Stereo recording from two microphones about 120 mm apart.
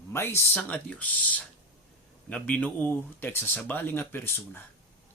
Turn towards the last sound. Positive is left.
turn(degrees=20)  # may be behind; listen again after turning